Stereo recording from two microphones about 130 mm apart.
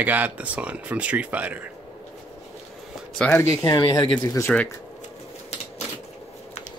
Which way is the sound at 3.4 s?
30° left (ahead or behind).